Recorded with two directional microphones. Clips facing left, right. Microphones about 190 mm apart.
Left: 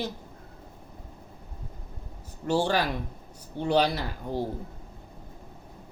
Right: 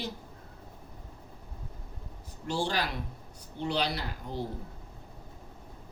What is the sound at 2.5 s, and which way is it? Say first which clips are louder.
Speech: left 6 dB; 50° left (ahead or behind).